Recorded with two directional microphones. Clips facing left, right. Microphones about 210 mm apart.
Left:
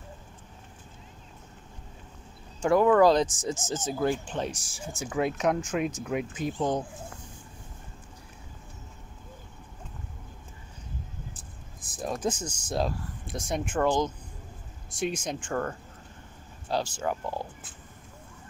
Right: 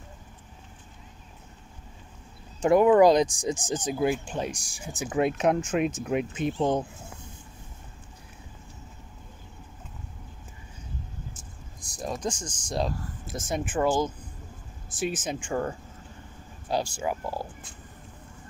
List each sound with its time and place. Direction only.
2.6 s speech: 20° right (ahead or behind)
11.8 s speech: centre (ahead or behind)